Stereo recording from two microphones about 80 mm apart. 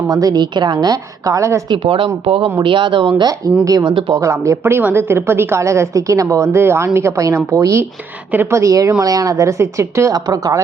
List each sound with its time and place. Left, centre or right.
0.1 s a woman's voice: right
1.7 s speech: right
3.6 s a woman's voice: right
3.8 s speech: right
4.2 s a woman's voice: right